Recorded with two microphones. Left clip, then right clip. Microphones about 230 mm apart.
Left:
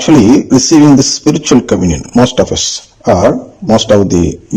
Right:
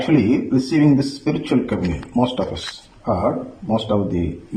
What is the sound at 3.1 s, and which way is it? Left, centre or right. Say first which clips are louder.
Speech: left 11 dB; left.